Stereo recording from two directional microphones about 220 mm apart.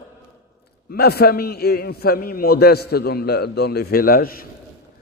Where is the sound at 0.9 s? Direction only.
45° left (ahead or behind).